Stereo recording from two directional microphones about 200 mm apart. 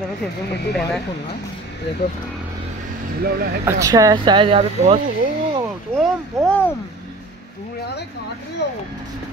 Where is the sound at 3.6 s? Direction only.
15° right (ahead or behind).